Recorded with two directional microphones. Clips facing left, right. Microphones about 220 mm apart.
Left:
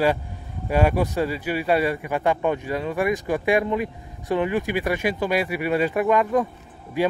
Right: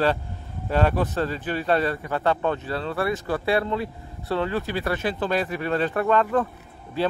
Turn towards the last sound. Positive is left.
turn(degrees=15)  # may be behind; listen again after turning